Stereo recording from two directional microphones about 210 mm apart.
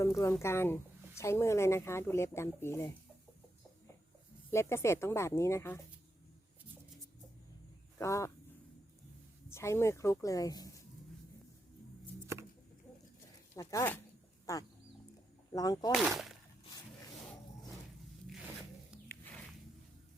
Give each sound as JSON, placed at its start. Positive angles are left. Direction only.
{"t": 0.0, "sound": "a woman's voice", "side_deg": 15}
{"t": 4.5, "sound": "a woman's voice", "side_deg": 15}
{"t": 7.9, "sound": "a woman's voice", "side_deg": 15}
{"t": 9.5, "sound": "a woman's voice", "side_deg": 10}
{"t": 13.6, "sound": "a woman's voice", "side_deg": 15}
{"t": 15.9, "sound": "speech", "side_deg": 0}
{"t": 19.0, "sound": "a sound", "side_deg": 10}